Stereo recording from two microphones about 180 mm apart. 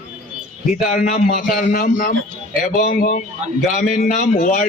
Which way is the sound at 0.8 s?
50° left (ahead or behind).